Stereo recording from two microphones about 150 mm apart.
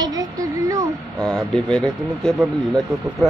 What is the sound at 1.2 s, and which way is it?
Speech, 5° left (ahead or behind).